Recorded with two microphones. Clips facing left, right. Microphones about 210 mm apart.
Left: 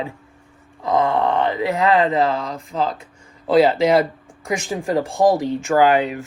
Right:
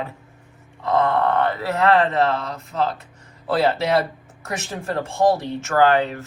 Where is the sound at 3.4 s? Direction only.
15° left (ahead or behind).